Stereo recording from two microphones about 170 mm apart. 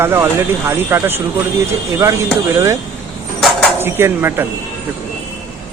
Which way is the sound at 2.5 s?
15° right (ahead or behind).